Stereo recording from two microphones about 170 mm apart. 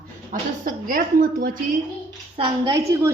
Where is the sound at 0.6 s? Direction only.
55° right (ahead or behind).